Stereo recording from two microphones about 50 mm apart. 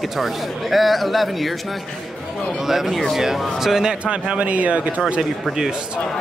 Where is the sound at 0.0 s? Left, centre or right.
Centre.